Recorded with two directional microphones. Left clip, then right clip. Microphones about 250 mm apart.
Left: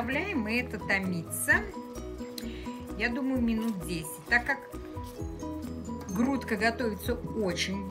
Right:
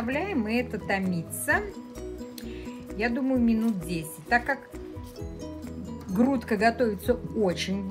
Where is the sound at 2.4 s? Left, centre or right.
Centre.